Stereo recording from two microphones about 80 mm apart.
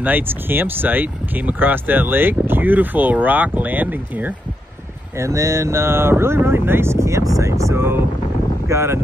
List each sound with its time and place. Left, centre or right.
0.0 s speech: right
5.1 s speech: right